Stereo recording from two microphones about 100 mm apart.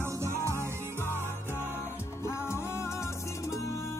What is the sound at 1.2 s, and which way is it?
Music, 25° left (ahead or behind).